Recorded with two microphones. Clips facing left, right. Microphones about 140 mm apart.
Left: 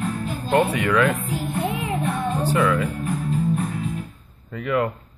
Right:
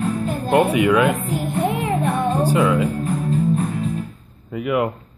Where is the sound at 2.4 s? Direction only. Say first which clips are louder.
Right 2 dB; 15° right (ahead or behind).